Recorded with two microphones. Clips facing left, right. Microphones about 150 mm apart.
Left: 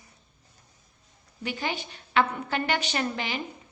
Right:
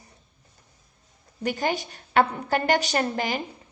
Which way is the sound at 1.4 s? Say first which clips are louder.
Right 6 dB; 45° right (ahead or behind).